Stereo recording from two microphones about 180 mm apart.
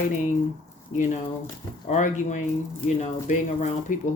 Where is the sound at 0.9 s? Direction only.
45° left (ahead or behind).